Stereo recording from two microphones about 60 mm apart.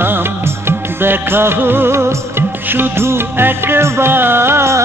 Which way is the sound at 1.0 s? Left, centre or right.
Right.